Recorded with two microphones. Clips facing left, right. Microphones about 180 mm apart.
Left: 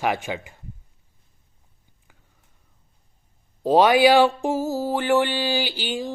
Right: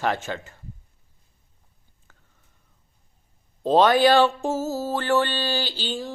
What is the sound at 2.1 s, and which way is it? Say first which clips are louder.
Whispering: left 1 dB; 15° left (ahead or behind).